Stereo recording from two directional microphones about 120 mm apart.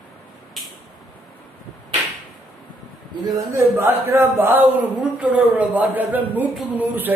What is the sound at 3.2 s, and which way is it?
A man's voice, 25° right (ahead or behind).